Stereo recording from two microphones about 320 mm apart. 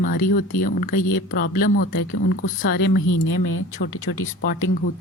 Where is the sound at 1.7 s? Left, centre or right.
Left.